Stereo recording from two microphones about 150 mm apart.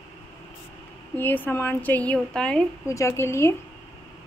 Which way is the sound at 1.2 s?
15° left (ahead or behind).